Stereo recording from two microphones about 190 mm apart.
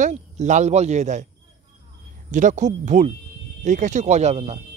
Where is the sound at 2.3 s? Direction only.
40° right (ahead or behind).